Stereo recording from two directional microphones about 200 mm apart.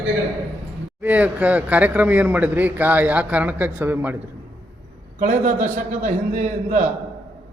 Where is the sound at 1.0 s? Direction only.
5° right (ahead or behind).